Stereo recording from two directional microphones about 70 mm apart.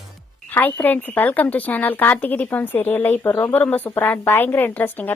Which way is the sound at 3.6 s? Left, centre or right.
Left.